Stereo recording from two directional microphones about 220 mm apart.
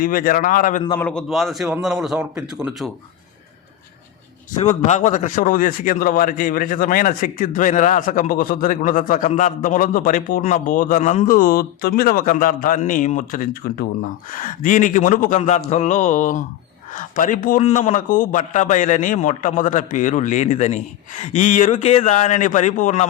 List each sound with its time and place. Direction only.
0.0 s a man's voice: 40° left (ahead or behind)
0.9 s a man's voice: 5° left (ahead or behind)
4.9 s a man's voice: 35° left (ahead or behind)